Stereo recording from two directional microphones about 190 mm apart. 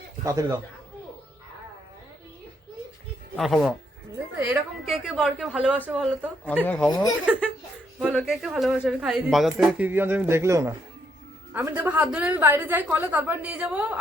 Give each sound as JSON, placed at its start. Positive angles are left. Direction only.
{"t": 0.3, "sound": "a woman's voice", "side_deg": -15}
{"t": 3.3, "sound": "a woman's voice", "side_deg": 0}
{"t": 6.5, "sound": "speech", "side_deg": 5}
{"t": 8.1, "sound": "a woman's voice", "side_deg": 0}